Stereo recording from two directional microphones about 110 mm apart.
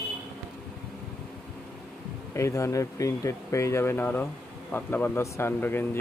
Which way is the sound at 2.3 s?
25° left (ahead or behind).